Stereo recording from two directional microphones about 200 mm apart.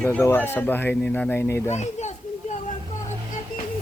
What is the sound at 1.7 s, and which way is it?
Speech, 35° left (ahead or behind).